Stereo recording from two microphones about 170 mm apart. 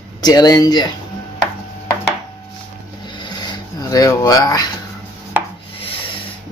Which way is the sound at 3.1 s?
25° left (ahead or behind).